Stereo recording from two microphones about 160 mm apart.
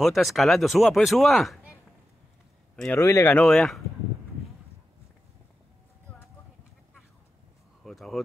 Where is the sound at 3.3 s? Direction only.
5° left (ahead or behind).